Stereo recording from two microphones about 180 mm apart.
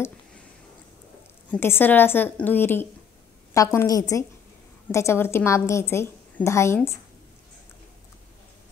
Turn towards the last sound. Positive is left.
turn(degrees=15)  # may be behind; listen again after turning